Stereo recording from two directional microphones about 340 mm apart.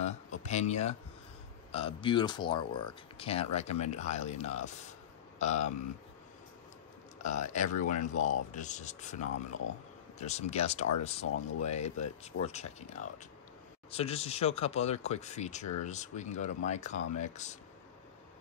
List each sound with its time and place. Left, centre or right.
0.0 s a sound: centre
1.7 s speech: centre
7.2 s speech: left